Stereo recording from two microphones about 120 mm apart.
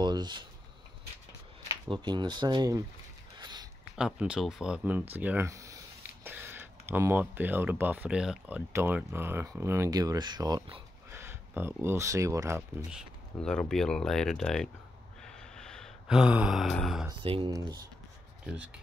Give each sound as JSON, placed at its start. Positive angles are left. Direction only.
{"t": 0.0, "sound": "a sound", "side_deg": -40}
{"t": 1.9, "sound": "speech", "side_deg": -40}
{"t": 3.3, "sound": "a sound", "side_deg": -40}
{"t": 3.9, "sound": "speech", "side_deg": -5}
{"t": 5.5, "sound": "a sound", "side_deg": -25}
{"t": 6.2, "sound": "speech", "side_deg": -15}
{"t": 11.1, "sound": "speech", "side_deg": -20}
{"t": 13.4, "sound": "speech", "side_deg": 5}
{"t": 15.2, "sound": "gasp", "side_deg": 5}
{"t": 16.7, "sound": "speech", "side_deg": 0}
{"t": 17.2, "sound": "speech", "side_deg": -45}